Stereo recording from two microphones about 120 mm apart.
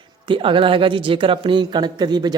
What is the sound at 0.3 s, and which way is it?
Speech, 45° right (ahead or behind).